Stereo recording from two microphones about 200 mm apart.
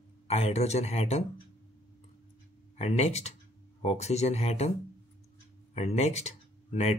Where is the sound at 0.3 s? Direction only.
35° left (ahead or behind).